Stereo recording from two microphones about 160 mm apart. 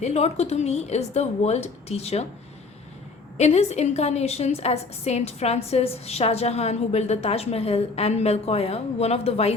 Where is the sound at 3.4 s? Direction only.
40° left (ahead or behind).